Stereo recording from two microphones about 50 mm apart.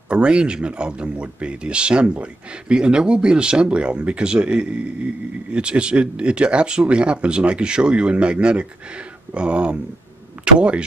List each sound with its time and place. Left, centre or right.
0.1 s speech: right